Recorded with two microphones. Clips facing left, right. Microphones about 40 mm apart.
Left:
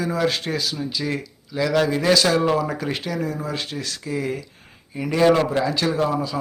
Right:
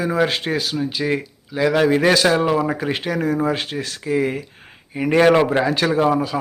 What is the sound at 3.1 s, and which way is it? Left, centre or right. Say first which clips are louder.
Speech: right 6 dB; right.